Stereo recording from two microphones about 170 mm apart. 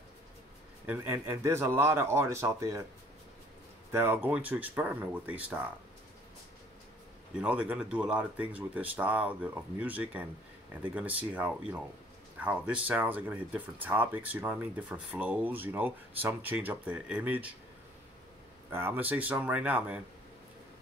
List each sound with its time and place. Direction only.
0.8 s speech: 15° right (ahead or behind)
3.9 s speech: 10° right (ahead or behind)
7.3 s speech: 5° right (ahead or behind)
18.7 s speech: 10° right (ahead or behind)